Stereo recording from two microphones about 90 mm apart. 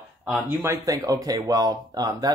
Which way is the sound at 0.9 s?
40° right (ahead or behind).